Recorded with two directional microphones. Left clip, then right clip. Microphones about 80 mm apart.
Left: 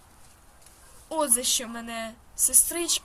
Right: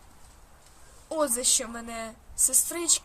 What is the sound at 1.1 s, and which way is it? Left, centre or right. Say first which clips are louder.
A woman's voice: even; right.